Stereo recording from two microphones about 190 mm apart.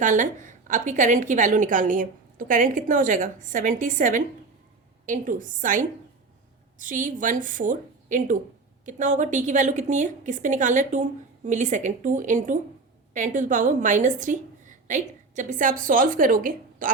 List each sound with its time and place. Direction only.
0.0 s a woman's voice: 40° right (ahead or behind)